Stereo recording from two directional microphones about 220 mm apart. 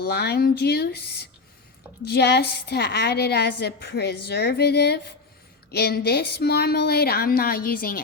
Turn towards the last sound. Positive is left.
turn(degrees=40)  # may be behind; listen again after turning